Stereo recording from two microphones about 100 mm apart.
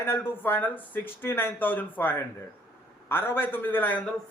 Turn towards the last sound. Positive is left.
turn(degrees=20)  # may be behind; listen again after turning